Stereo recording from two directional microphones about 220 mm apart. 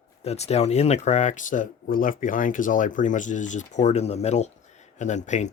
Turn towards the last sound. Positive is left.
turn(degrees=35)  # may be behind; listen again after turning